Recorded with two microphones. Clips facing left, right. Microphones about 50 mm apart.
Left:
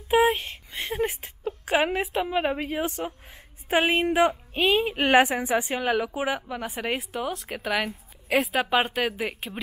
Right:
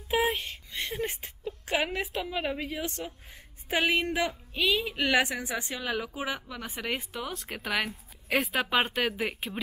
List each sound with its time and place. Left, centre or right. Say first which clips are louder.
0.1 s a woman's voice: left 7 dB; centre
2.2 s speech: left 6 dB; left
2.6 s a woman's voice: left 6 dB; centre
4.0 s a woman's voice: left 8 dB; centre
4.8 s a woman's voice: left 6 dB; left
5.4 s a woman's voice: left 9 dB; centre